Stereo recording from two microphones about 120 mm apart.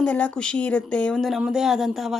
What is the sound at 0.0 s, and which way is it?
Speech, 10° left (ahead or behind).